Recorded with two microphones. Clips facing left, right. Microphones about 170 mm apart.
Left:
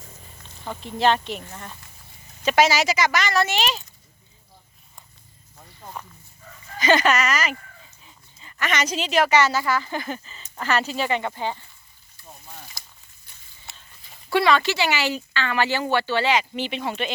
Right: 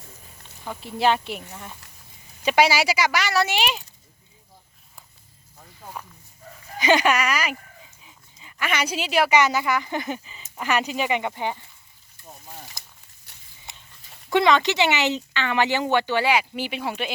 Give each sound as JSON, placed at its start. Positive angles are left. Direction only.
{"t": 0.6, "sound": "speech", "side_deg": -5}
{"t": 5.5, "sound": "snake", "side_deg": -5}
{"t": 6.7, "sound": "speech", "side_deg": -15}
{"t": 12.5, "sound": "a sound", "side_deg": -15}
{"t": 13.3, "sound": "a sound", "side_deg": -75}
{"t": 13.7, "sound": "dog", "side_deg": -20}
{"t": 14.3, "sound": "speech", "side_deg": -20}